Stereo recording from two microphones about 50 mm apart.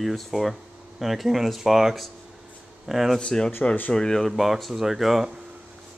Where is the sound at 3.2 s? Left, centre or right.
Centre.